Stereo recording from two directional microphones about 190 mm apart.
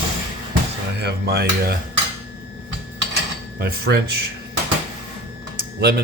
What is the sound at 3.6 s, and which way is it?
Speech, 55° right (ahead or behind).